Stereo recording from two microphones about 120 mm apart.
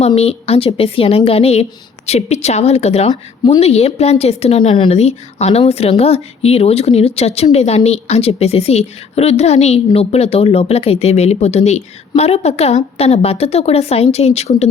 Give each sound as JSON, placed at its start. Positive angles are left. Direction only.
{"t": 0.2, "sound": "a woman's voice", "side_deg": 55}
{"t": 3.1, "sound": "speech", "side_deg": 40}
{"t": 3.6, "sound": "a woman's voice", "side_deg": 60}